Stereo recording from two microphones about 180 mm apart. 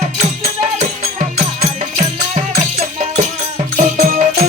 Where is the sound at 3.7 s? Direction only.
40° right (ahead or behind).